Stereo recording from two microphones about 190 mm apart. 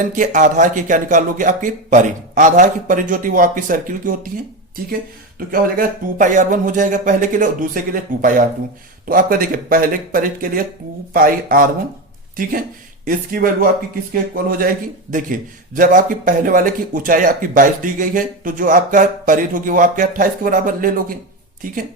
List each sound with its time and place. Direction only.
0.1 s a man's voice: 40° right (ahead or behind)
5.5 s a man's voice: 45° right (ahead or behind)